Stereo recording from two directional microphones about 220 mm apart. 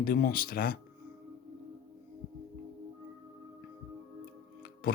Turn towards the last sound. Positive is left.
turn(degrees=40)  # may be behind; listen again after turning